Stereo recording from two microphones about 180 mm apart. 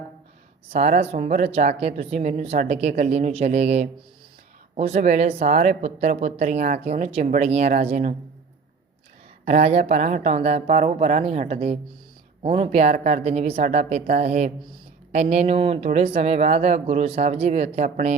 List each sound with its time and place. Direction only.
0.7 s speech: 40° right (ahead or behind)
9.4 s a woman's voice: 40° right (ahead or behind)